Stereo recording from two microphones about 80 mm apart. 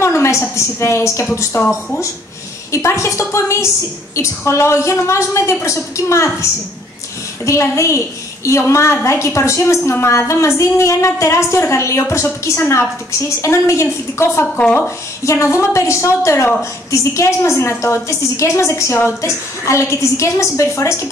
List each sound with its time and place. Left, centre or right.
0.0 s a woman's voice: left
1.6 s speech: centre
2.7 s a woman's voice: left
14.6 s speech: centre
15.2 s a woman's voice: left